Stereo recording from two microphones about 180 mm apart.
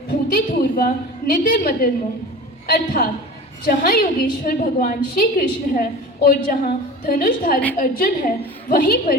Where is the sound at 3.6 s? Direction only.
55° left (ahead or behind).